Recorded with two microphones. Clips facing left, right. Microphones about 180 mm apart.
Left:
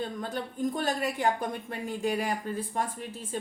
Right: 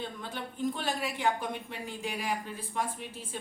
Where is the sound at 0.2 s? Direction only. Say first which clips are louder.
Left 4 dB; 45° left (ahead or behind).